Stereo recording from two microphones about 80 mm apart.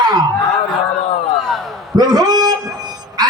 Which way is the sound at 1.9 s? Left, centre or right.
Right.